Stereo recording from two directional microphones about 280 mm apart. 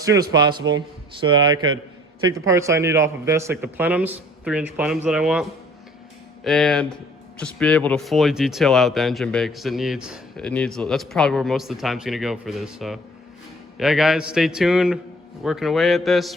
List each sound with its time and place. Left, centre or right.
0.0 s a man's voice: centre